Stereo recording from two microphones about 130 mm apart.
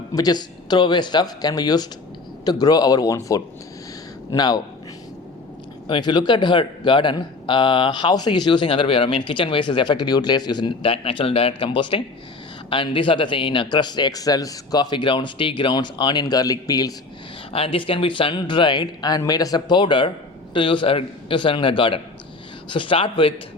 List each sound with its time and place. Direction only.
0.1 s speech: 30° left (ahead or behind)
5.9 s speech: 35° left (ahead or behind)
10.9 s speech: 45° left (ahead or behind); by 16.9 s 30° left (ahead or behind)
17.5 s speech: 45° left (ahead or behind)